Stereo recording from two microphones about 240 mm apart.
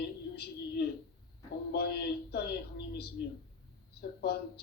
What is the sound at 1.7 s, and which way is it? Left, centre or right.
Speech, left.